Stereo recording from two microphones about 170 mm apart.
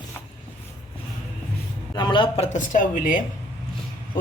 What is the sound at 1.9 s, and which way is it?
Speech, 25° left (ahead or behind).